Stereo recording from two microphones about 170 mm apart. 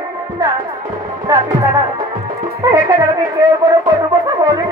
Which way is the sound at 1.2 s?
20° right (ahead or behind).